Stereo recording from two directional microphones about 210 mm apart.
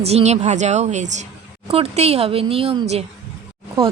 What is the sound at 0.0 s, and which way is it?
A woman's voice, 30° right (ahead or behind).